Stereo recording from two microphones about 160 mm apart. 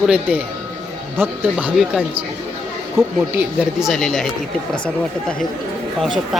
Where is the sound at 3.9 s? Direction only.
5° left (ahead or behind).